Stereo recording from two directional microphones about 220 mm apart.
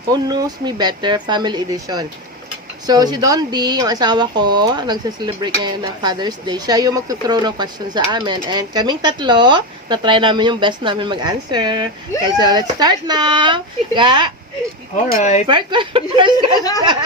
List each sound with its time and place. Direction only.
0.1 s speech: 15° right (ahead or behind)
14.9 s speech: 35° left (ahead or behind)
15.4 s speech: 20° right (ahead or behind)